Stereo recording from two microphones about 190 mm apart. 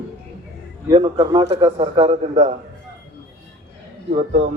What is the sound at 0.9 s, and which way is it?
A man's voice, 25° right (ahead or behind).